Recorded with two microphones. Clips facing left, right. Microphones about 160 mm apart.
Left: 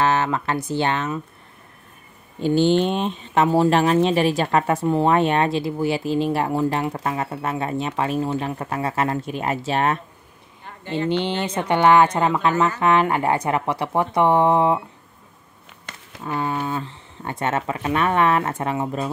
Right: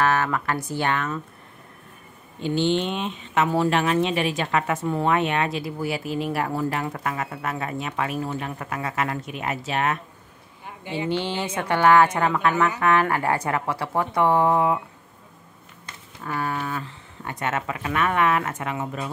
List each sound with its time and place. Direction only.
0.0 s speech: 25° left (ahead or behind)
2.4 s speech: 40° left (ahead or behind)
10.6 s a sound: 10° right (ahead or behind)
11.1 s speech: 20° left (ahead or behind)
16.3 s speech: 20° left (ahead or behind)